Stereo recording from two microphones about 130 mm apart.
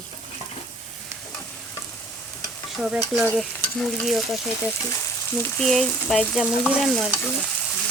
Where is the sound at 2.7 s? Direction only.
5° right (ahead or behind).